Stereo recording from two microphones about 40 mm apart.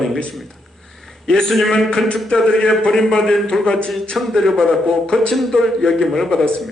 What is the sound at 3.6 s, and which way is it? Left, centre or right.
Speech, left.